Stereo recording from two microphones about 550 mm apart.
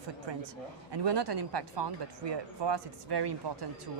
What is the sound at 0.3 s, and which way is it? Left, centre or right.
Speech, right.